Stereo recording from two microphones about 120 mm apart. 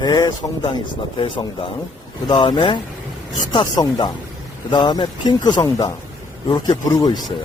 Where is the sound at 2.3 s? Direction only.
45° left (ahead or behind).